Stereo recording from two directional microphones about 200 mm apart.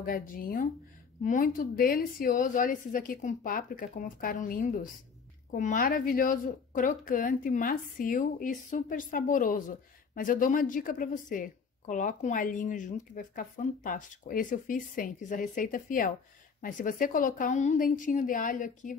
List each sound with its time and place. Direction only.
0.0 s a woman's voice: 45° left (ahead or behind)